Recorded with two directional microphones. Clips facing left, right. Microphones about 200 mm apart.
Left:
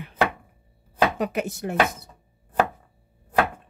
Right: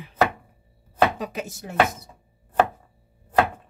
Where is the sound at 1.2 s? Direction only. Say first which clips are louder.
Left 5 dB; 65° left (ahead or behind).